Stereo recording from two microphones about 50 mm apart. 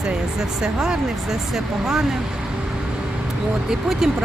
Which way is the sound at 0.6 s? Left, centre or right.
Centre.